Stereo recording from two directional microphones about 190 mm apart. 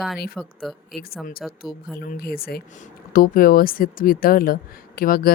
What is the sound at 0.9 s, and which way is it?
Speech, 50° left (ahead or behind).